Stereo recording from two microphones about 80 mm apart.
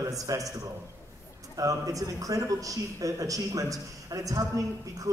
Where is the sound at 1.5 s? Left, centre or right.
Right.